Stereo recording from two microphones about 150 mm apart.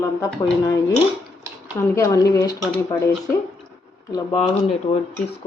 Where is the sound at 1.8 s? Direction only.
20° left (ahead or behind).